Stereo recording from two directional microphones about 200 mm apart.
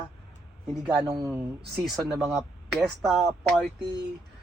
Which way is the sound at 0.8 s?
15° right (ahead or behind).